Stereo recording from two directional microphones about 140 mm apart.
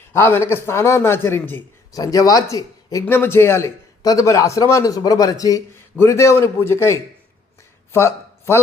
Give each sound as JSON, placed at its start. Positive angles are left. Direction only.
{"t": 0.1, "sound": "speech", "side_deg": 15}
{"t": 1.9, "sound": "a man's voice", "side_deg": 25}